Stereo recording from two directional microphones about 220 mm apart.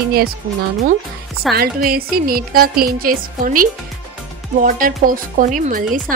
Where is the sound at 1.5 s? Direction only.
45° right (ahead or behind).